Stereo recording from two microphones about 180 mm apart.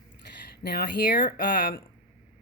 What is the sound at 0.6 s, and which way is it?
Speech, 55° left (ahead or behind).